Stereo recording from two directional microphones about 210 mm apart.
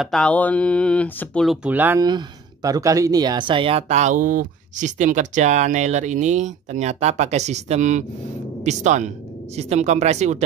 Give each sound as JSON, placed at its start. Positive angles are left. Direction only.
{"t": 0.0, "sound": "speech", "side_deg": 5}